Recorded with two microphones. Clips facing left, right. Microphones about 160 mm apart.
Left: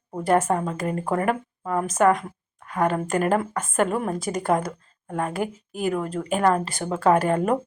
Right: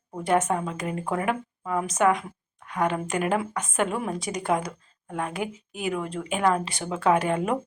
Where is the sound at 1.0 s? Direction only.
45° left (ahead or behind).